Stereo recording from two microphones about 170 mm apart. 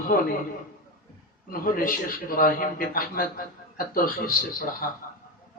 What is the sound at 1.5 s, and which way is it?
A man's voice, 55° left (ahead or behind).